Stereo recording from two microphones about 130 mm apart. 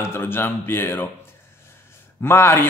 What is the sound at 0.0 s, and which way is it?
A man's voice, 20° left (ahead or behind).